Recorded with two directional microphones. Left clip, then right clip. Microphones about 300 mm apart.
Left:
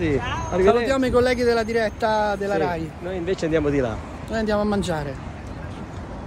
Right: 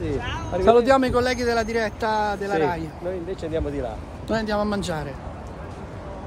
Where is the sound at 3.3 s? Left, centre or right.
Left.